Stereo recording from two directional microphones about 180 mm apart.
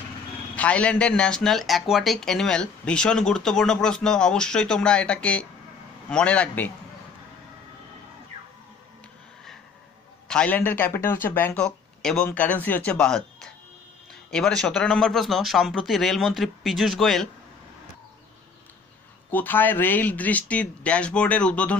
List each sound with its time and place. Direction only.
0.6 s speech: 5° left (ahead or behind)
10.2 s speech: 5° left (ahead or behind)
19.3 s speech: 10° left (ahead or behind)